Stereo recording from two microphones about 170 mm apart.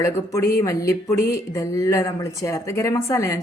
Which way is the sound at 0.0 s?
15° left (ahead or behind).